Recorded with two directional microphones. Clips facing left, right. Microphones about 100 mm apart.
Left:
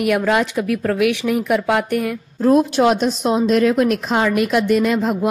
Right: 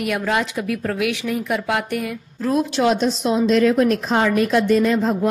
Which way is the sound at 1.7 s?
45° left (ahead or behind).